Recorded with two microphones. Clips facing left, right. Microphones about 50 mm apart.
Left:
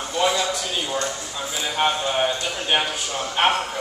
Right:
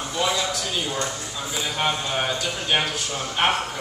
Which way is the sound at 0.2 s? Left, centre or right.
Centre.